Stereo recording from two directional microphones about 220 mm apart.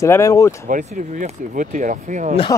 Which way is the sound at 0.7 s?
35° right (ahead or behind).